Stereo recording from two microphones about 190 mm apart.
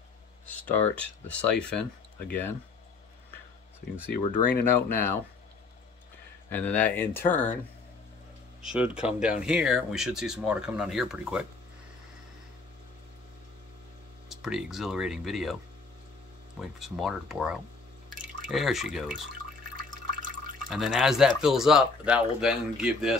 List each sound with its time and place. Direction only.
0.5 s speech: 10° left (ahead or behind)
4.1 s speech: 50° left (ahead or behind)
6.5 s speech: 10° left (ahead or behind)
8.6 s speech: 5° right (ahead or behind)
14.3 s speech: centre (ahead or behind)
16.6 s speech: centre (ahead or behind)
19.9 s water: 45° right (ahead or behind)
20.7 s speech: 5° right (ahead or behind)